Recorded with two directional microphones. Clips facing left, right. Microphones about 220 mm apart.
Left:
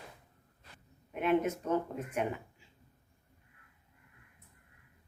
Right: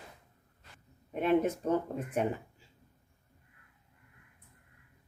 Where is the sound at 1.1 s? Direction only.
35° right (ahead or behind).